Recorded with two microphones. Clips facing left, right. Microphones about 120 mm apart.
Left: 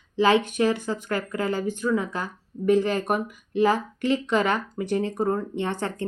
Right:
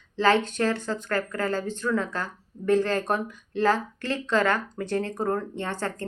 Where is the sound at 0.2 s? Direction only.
15° left (ahead or behind).